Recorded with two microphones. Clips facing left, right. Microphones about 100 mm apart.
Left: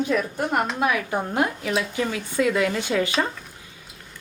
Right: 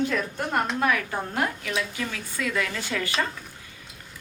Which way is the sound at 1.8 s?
30° left (ahead or behind).